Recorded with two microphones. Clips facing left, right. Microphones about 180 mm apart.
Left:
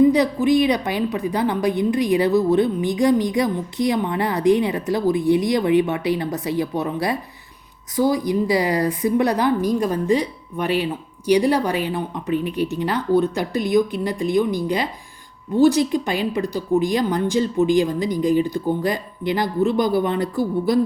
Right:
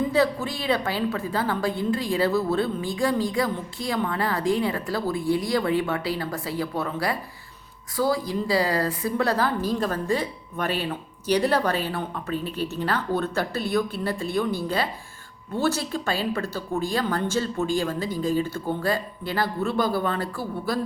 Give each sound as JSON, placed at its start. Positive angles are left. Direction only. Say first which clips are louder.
{"t": 0.1, "sound": "a woman's voice", "louder": "left 6 dB", "side_deg": 15}